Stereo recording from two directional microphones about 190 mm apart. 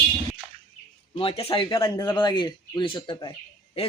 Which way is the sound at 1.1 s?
30° left (ahead or behind).